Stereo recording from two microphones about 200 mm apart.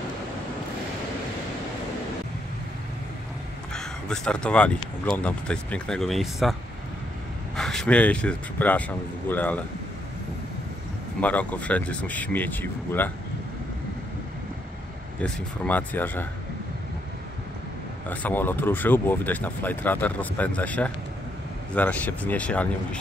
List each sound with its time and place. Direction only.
3.7 s speech: 5° left (ahead or behind)
7.5 s speech: centre (ahead or behind)
11.1 s speech: 5° left (ahead or behind)
15.1 s speech: 5° left (ahead or behind)
18.0 s speech: 10° left (ahead or behind)